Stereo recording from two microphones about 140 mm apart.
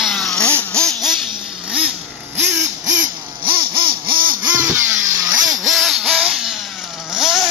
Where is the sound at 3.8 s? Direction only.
90° right.